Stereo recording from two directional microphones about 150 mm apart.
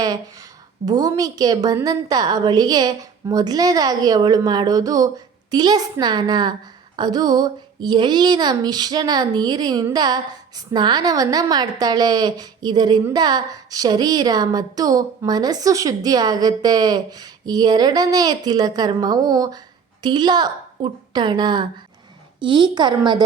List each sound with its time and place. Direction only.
0.9 s a woman's voice: 25° right (ahead or behind)